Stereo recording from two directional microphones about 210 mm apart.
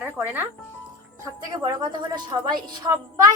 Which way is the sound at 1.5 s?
20° right (ahead or behind).